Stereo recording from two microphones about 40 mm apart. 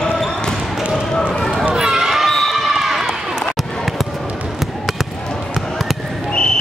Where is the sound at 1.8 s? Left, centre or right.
Centre.